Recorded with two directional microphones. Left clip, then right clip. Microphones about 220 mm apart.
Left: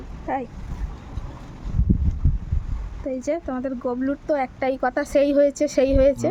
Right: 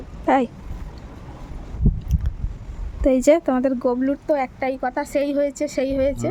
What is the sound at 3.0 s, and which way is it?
Speech, 40° right (ahead or behind).